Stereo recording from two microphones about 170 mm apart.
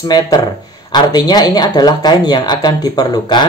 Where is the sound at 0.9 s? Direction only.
25° left (ahead or behind).